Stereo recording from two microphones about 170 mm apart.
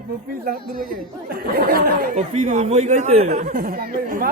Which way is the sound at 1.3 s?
60° right (ahead or behind).